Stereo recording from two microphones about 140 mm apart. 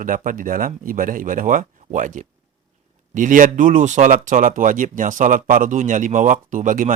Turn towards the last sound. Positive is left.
turn(degrees=-65)  # may be behind; listen again after turning